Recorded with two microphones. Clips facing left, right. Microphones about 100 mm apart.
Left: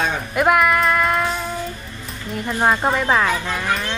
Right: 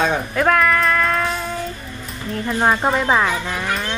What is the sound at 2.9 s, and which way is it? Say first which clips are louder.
Speech: right 1 dB; 15° right (ahead or behind).